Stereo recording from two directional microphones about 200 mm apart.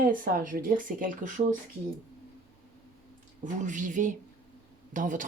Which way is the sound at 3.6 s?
40° right (ahead or behind).